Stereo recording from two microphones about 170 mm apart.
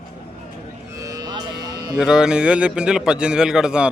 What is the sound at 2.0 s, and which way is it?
A man's voice, 5° right (ahead or behind).